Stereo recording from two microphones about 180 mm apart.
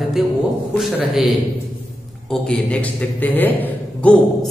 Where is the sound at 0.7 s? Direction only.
Centre (ahead or behind).